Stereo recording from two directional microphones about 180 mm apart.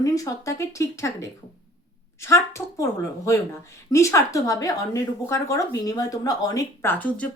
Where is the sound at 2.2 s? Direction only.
15° left (ahead or behind).